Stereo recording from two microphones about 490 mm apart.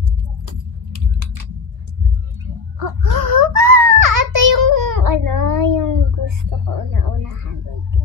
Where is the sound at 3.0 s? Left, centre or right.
Right.